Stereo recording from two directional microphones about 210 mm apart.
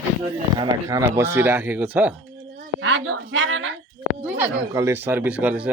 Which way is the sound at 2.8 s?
60° right (ahead or behind).